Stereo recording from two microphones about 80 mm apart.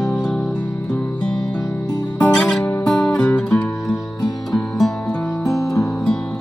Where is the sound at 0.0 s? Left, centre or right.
Centre.